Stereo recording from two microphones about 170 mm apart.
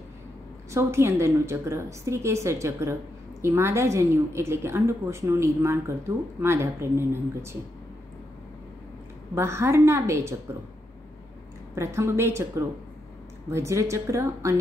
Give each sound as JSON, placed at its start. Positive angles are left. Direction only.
{"t": 0.7, "sound": "a woman's voice", "side_deg": -15}
{"t": 9.3, "sound": "a woman's voice", "side_deg": -15}
{"t": 11.7, "sound": "a woman's voice", "side_deg": -15}